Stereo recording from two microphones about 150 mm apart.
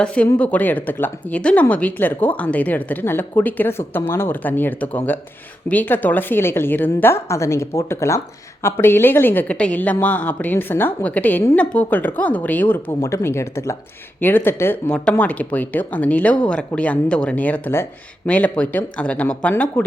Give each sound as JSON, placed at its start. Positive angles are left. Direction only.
{"t": 0.0, "sound": "a woman's voice", "side_deg": 5}